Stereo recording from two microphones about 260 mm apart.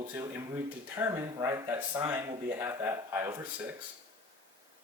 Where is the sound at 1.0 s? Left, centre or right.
Centre.